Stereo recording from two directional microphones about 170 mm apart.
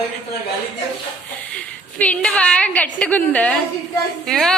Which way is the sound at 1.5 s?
5° left (ahead or behind).